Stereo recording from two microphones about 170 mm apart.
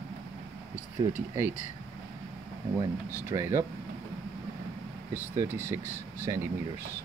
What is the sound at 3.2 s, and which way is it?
Speech, 15° right (ahead or behind).